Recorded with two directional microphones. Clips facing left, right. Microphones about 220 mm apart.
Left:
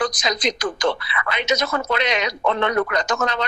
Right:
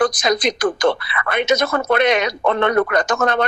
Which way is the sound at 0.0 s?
55° right (ahead or behind).